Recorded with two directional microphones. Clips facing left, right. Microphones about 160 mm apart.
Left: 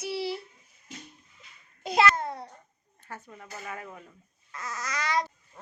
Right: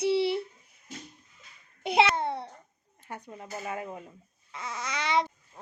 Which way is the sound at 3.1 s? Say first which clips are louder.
Right 3 dB; 20° right (ahead or behind).